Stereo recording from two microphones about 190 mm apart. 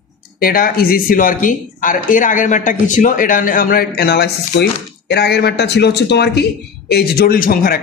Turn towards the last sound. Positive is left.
turn(degrees=50)  # may be behind; listen again after turning